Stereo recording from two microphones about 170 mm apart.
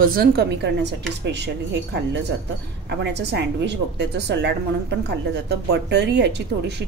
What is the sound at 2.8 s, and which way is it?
A woman's voice, 80° right.